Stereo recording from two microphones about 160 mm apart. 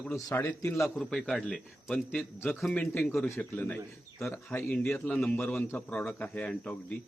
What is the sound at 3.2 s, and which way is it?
A man's voice, 15° left (ahead or behind).